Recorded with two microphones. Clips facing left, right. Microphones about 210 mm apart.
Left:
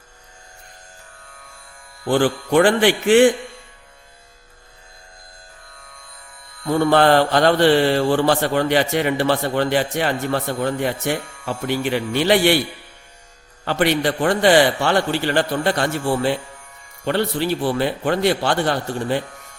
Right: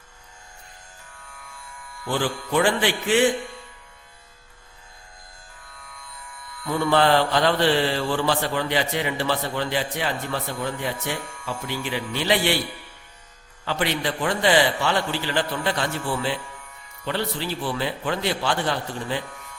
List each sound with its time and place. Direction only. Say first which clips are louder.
2.0 s a man's voice: left 8 dB; 65° left (ahead or behind)
6.6 s a man's voice: left 5 dB; 50° left (ahead or behind)
11.0 s a man's voice: left 6 dB; 65° left (ahead or behind)
13.7 s speech: left 7 dB; 70° left (ahead or behind)
14.8 s a man's voice: left 5 dB; 55° left (ahead or behind)
15.9 s speech: left 7 dB; 45° left (ahead or behind)
17.1 s a man's voice: left 7 dB; 65° left (ahead or behind)
18.9 s speech: left 6 dB; 50° left (ahead or behind)